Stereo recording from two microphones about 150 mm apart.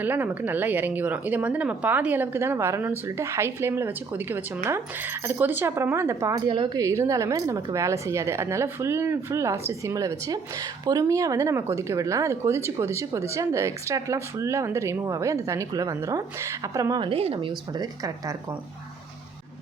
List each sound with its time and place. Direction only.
0.0 s a woman's voice: 10° right (ahead or behind)
6.5 s speech: 30° right (ahead or behind)
6.8 s speech: 20° right (ahead or behind)
17.1 s speech: 40° right (ahead or behind)